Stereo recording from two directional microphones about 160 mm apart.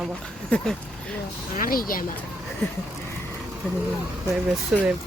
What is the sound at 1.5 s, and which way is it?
Speech, 60° left (ahead or behind).